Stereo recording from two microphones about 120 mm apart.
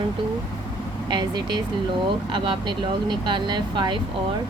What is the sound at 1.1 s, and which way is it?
Speech, 40° right (ahead or behind).